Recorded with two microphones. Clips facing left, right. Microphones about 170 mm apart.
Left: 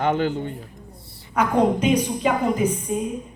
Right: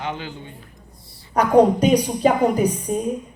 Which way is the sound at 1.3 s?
35° right (ahead or behind).